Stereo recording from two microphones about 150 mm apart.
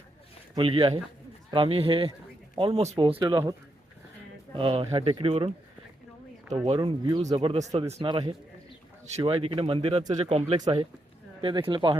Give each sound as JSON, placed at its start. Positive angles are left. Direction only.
{"t": 0.5, "sound": "speech", "side_deg": -35}
{"t": 4.5, "sound": "speech", "side_deg": -35}
{"t": 6.7, "sound": "speech", "side_deg": -35}
{"t": 8.1, "sound": "speech", "side_deg": -25}
{"t": 9.2, "sound": "speech", "side_deg": -40}